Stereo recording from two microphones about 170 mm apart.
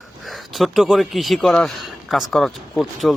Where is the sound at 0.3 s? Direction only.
Centre (ahead or behind).